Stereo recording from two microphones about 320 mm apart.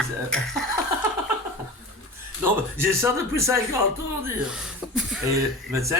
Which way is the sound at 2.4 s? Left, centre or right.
Centre.